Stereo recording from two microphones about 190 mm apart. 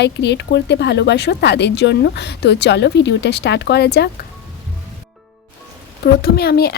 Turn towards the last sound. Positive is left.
turn(degrees=55)  # may be behind; listen again after turning